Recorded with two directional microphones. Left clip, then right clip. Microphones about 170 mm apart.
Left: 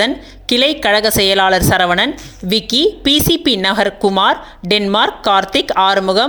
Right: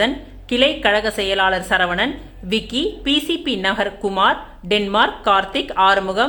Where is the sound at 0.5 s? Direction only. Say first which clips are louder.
Left 3 dB; 40° left (ahead or behind).